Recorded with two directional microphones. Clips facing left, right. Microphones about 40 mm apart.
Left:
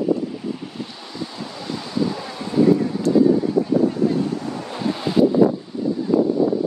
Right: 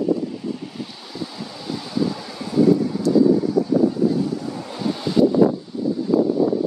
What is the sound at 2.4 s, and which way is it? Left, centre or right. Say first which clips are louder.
Vehicle: even; left.